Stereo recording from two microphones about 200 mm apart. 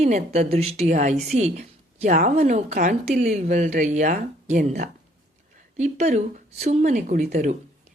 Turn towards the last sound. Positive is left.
turn(degrees=-35)  # may be behind; listen again after turning